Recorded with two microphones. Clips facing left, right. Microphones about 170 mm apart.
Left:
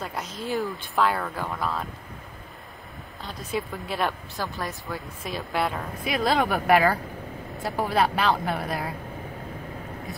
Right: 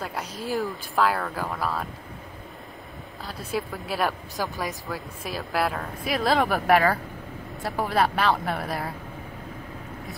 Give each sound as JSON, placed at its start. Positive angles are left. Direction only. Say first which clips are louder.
{"t": 0.0, "sound": "speech", "louder": "even", "side_deg": -5}
{"t": 3.3, "sound": "speech", "louder": "even", "side_deg": -5}
{"t": 4.4, "sound": "speech", "louder": "right 2 dB", "side_deg": -15}
{"t": 4.8, "sound": "speech", "louder": "right 1 dB", "side_deg": 0}